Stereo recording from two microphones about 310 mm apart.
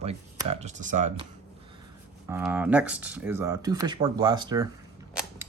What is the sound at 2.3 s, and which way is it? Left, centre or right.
Speech, centre.